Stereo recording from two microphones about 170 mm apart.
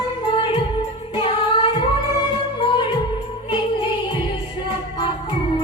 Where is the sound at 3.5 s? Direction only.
30° left (ahead or behind).